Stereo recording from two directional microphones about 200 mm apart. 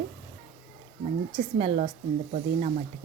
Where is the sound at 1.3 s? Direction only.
30° right (ahead or behind).